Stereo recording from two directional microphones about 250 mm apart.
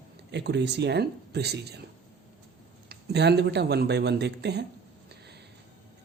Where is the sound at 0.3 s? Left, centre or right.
Right.